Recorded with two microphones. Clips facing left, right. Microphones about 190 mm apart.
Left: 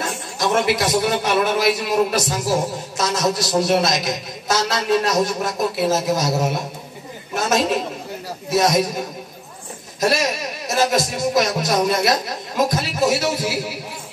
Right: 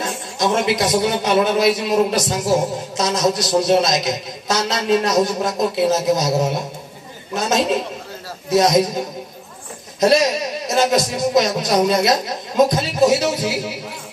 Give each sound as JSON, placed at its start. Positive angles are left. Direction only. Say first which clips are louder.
{"t": 0.4, "sound": "a man's voice", "louder": "right 1 dB", "side_deg": -20}
{"t": 9.9, "sound": "a man's voice", "louder": "right 5 dB", "side_deg": -20}